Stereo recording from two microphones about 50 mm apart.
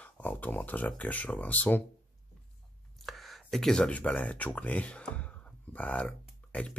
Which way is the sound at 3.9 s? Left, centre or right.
Left.